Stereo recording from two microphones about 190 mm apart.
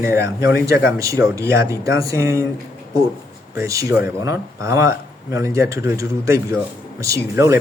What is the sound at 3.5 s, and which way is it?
Speech, 15° right (ahead or behind).